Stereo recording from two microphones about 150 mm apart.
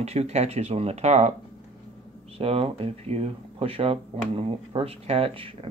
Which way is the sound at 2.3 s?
40° right (ahead or behind).